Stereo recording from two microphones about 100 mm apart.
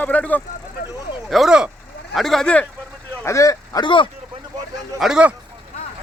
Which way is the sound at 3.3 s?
30° left (ahead or behind).